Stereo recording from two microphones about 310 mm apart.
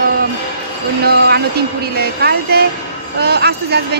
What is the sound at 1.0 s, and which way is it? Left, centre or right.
A man's voice, right.